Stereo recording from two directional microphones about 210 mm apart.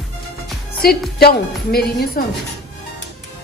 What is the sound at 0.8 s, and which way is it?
Speech, 45° left (ahead or behind).